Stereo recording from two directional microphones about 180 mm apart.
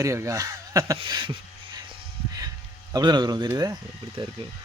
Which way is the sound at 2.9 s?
25° right (ahead or behind).